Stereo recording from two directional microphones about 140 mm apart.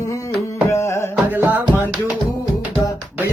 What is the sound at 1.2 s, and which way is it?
Music, 10° right (ahead or behind).